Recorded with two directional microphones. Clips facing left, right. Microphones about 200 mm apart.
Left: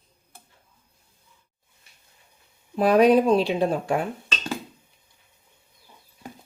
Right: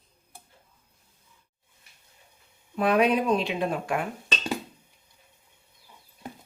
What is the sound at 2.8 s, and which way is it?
Speech, 35° left (ahead or behind).